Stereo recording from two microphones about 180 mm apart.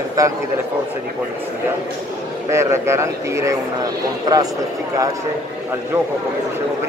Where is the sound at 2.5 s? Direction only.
15° right (ahead or behind).